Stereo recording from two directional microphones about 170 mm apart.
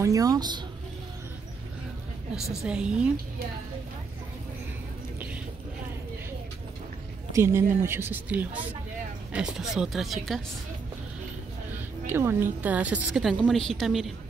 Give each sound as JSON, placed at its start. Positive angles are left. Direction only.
{"t": 0.0, "sound": "speech", "side_deg": -20}
{"t": 2.6, "sound": "a woman's voice", "side_deg": -5}
{"t": 7.3, "sound": "a woman's voice", "side_deg": -15}
{"t": 12.1, "sound": "a woman's voice", "side_deg": -15}